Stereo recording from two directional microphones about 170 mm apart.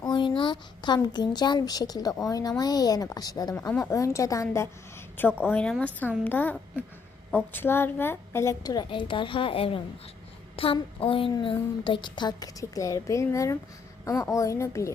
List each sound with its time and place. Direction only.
0.0 s a woman's voice: 25° left (ahead or behind)